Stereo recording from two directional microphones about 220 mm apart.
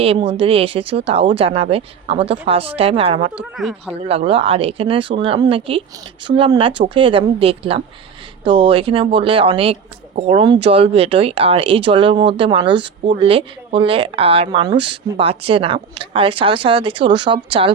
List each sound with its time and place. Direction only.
0.0 s a woman's voice: 25° right (ahead or behind)
3.5 s speech: centre (ahead or behind)
3.9 s a woman's voice: 25° right (ahead or behind)